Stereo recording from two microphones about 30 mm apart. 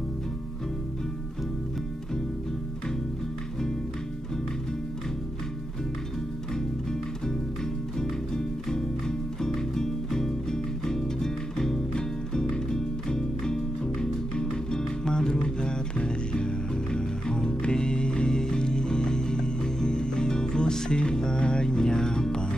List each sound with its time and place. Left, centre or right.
9.4 s music: centre